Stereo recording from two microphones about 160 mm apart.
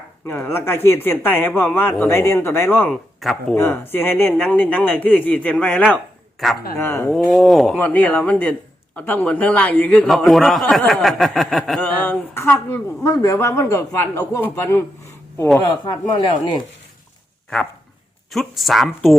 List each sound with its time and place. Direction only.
0.3 s a man's voice: 15° left (ahead or behind)
6.7 s speech: 15° left (ahead or behind)
7.1 s a man's voice: centre (ahead or behind)
12.3 s speech: 15° left (ahead or behind)
15.6 s speech: 30° left (ahead or behind)
18.3 s a man's voice: centre (ahead or behind)